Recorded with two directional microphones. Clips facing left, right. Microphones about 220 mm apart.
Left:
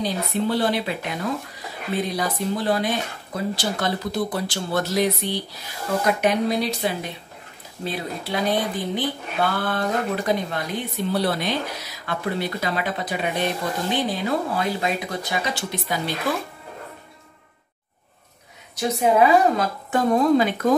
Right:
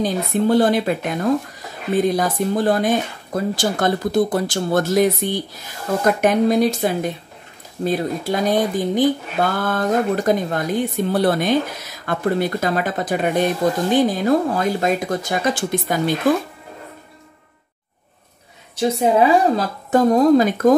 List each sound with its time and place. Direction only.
0.0 s speech: 45° right (ahead or behind)
18.8 s a woman's voice: 30° right (ahead or behind)